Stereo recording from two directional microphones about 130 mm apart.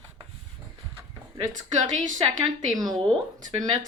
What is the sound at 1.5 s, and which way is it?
Speech, 75° right (ahead or behind).